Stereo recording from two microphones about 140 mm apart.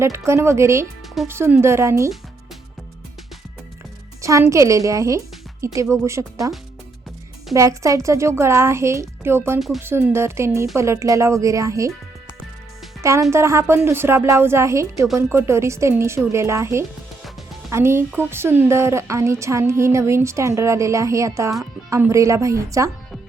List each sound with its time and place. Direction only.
0.0 s a woman's voice: 20° right (ahead or behind)
4.2 s a woman's voice: 20° right (ahead or behind)
7.5 s a woman's voice: 20° right (ahead or behind)
9.6 s speech: centre (ahead or behind)
9.8 s a woman's voice: 20° right (ahead or behind)
13.0 s a woman's voice: 20° right (ahead or behind)